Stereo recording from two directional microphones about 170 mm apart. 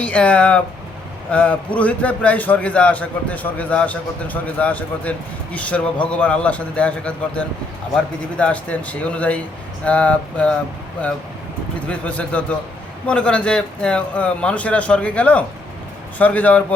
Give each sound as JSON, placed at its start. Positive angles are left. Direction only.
{"t": 0.0, "sound": "a man's voice", "side_deg": 5}
{"t": 11.9, "sound": "a man's voice", "side_deg": 5}